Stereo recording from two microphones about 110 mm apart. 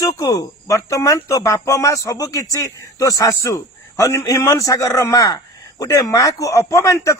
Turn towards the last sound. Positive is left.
turn(degrees=25)  # may be behind; listen again after turning